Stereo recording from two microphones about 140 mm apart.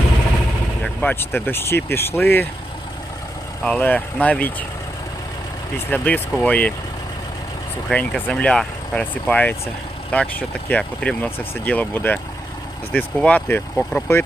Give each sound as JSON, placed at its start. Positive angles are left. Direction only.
{"t": 0.8, "sound": "speech", "side_deg": 15}
{"t": 3.6, "sound": "speech", "side_deg": 10}
{"t": 5.9, "sound": "speech", "side_deg": 10}
{"t": 7.9, "sound": "speech", "side_deg": 5}